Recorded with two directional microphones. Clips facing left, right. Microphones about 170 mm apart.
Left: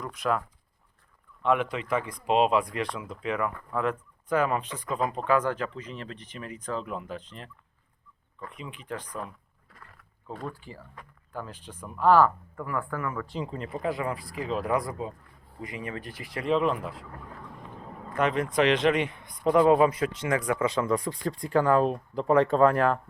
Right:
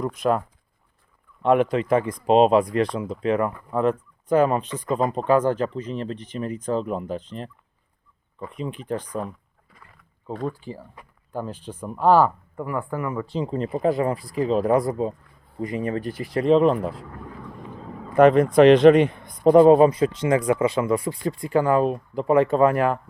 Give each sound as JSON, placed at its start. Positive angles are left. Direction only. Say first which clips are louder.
{"t": 0.0, "sound": "speech", "louder": "right 6 dB", "side_deg": -30}
{"t": 3.5, "sound": "speech", "louder": "right 4 dB", "side_deg": -15}
{"t": 3.8, "sound": "speech", "louder": "right 7 dB", "side_deg": -30}
{"t": 6.8, "sound": "speech", "louder": "right 8 dB", "side_deg": -40}
{"t": 8.5, "sound": "speech", "louder": "right 10 dB", "side_deg": -40}
{"t": 11.3, "sound": "speech", "louder": "right 8 dB", "side_deg": -30}
{"t": 12.5, "sound": "speech", "louder": "right 5 dB", "side_deg": -20}
{"t": 13.3, "sound": "speech", "louder": "right 8 dB", "side_deg": -30}
{"t": 18.2, "sound": "speech", "louder": "right 11 dB", "side_deg": -50}
{"t": 20.7, "sound": "speech", "louder": "right 4 dB", "side_deg": -10}